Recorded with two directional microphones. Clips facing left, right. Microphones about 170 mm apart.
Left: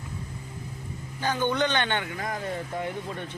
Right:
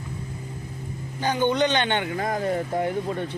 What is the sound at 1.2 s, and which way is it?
A man's voice, 15° right (ahead or behind).